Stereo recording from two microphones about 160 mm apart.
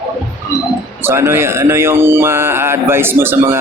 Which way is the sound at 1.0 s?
15° right (ahead or behind).